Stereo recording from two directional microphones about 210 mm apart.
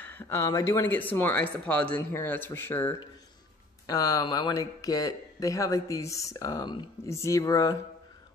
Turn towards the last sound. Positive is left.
turn(degrees=15)  # may be behind; listen again after turning